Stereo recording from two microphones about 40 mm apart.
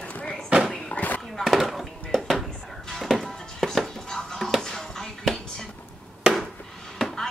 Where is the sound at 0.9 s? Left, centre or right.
Left.